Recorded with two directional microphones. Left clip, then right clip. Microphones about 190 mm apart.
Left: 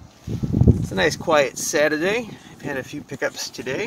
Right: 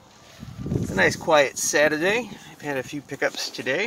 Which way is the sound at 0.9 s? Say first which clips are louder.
Even; 10° left (ahead or behind).